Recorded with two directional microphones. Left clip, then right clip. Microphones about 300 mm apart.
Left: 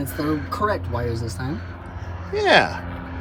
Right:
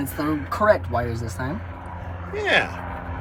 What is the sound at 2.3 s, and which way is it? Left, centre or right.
Speech, centre.